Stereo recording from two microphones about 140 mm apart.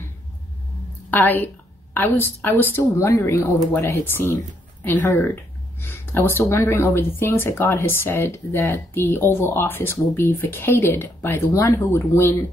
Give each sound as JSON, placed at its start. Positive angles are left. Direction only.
{"t": 1.1, "sound": "speech", "side_deg": 15}